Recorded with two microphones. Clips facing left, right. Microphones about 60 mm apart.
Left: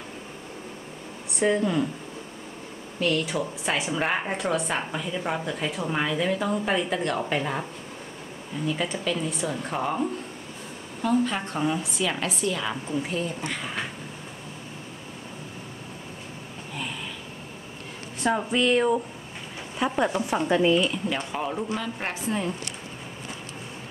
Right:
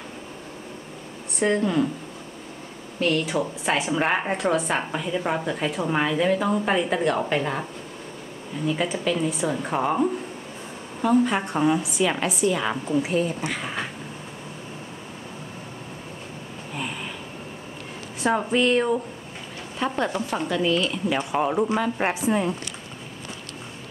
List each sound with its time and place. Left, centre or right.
1.4 s a woman's voice: centre
3.0 s a woman's voice: centre
8.6 s a woman's voice: centre
13.0 s a woman's voice: centre
18.2 s a woman's voice: centre
20.4 s speech: left
21.1 s a woman's voice: centre
21.4 s speech: right